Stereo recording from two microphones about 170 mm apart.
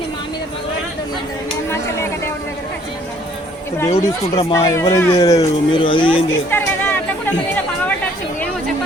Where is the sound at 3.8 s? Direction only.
35° left (ahead or behind).